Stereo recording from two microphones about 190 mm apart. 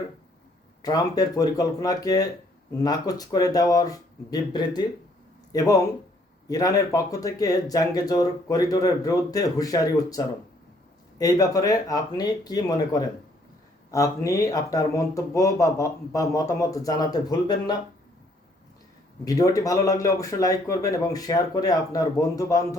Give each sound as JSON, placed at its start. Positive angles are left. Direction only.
{"t": 0.8, "sound": "speech", "side_deg": 20}
{"t": 19.2, "sound": "speech", "side_deg": 20}